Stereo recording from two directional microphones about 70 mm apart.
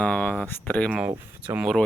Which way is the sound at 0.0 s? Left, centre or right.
Centre.